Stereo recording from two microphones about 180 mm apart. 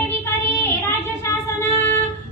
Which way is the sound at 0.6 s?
15° left (ahead or behind).